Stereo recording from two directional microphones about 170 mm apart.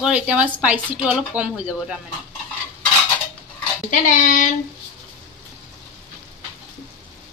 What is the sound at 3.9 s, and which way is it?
Speech, 50° left (ahead or behind).